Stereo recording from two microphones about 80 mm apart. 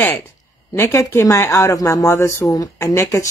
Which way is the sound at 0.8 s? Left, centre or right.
Left.